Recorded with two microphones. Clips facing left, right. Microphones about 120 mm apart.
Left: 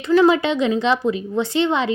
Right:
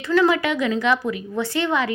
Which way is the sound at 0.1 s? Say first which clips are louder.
Left 4 dB; 20° left (ahead or behind).